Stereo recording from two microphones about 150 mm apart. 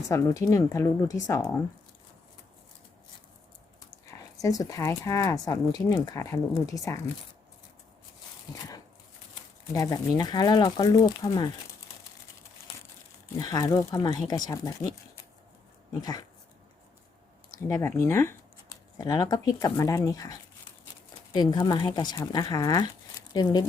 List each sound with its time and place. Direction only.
0.1 s speech: 20° left (ahead or behind)
4.4 s speech: 25° left (ahead or behind)
9.3 s a sound: 25° left (ahead or behind)
10.2 s speech: 25° left (ahead or behind)
13.4 s speech: 25° left (ahead or behind)
15.9 s speech: 25° left (ahead or behind)
17.5 s speech: 20° left (ahead or behind)